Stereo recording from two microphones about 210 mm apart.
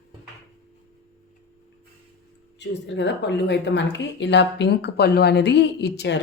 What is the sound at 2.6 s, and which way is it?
Speech, 55° left (ahead or behind).